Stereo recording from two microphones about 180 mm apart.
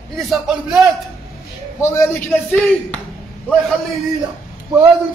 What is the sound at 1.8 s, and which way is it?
Speech, 15° left (ahead or behind).